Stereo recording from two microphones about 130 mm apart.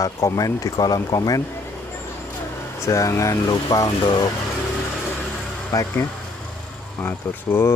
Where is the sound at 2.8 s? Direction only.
25° left (ahead or behind).